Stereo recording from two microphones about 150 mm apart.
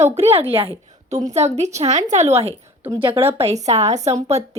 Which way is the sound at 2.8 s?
15° right (ahead or behind).